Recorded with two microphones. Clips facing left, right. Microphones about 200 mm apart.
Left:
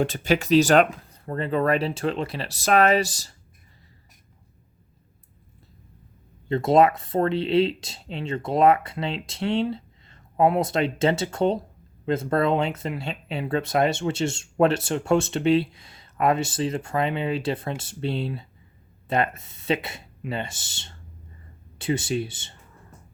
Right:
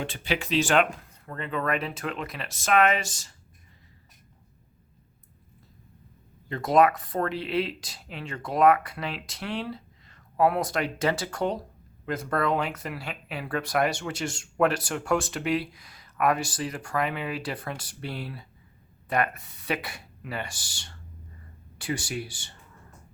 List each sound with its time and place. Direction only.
0.0 s speech: 40° left (ahead or behind)
6.5 s speech: 25° left (ahead or behind)